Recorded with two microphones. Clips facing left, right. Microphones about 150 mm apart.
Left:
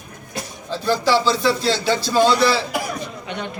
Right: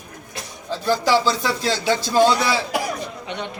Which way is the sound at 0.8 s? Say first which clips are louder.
Left 1 dB; 15° right (ahead or behind).